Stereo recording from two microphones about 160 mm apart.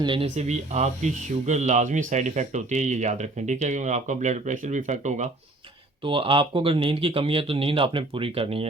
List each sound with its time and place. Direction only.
0.0 s speech: 30° right (ahead or behind)
0.3 s speech: 45° right (ahead or behind)
6.1 s speech: 30° right (ahead or behind)